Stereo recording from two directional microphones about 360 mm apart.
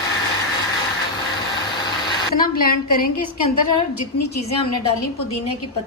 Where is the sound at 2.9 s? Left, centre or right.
Left.